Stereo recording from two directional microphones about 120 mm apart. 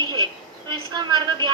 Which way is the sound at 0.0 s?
35° right (ahead or behind).